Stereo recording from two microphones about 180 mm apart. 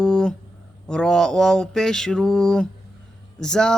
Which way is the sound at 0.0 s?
5° left (ahead or behind).